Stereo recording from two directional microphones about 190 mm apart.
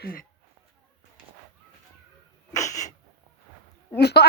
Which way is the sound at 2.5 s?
20° left (ahead or behind).